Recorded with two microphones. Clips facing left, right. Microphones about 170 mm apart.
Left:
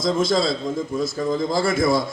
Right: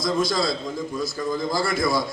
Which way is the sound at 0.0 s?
25° left (ahead or behind).